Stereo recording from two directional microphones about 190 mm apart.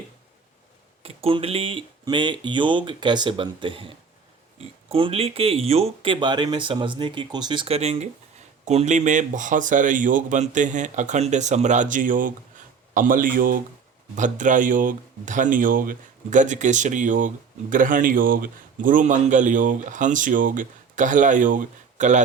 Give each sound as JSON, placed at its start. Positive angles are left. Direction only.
{"t": 1.0, "sound": "speech", "side_deg": -30}